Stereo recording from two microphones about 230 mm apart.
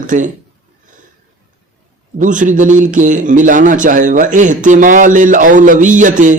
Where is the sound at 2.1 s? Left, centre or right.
Right.